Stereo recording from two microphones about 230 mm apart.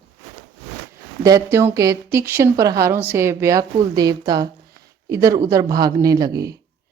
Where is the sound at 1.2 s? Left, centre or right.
Centre.